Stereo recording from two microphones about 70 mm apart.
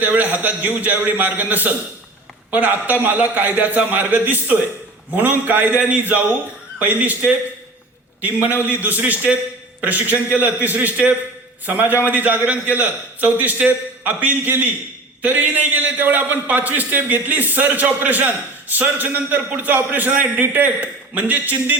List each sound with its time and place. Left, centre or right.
0.0 s a man's voice: right